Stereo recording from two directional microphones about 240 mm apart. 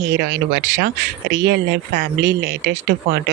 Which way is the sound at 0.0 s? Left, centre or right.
Right.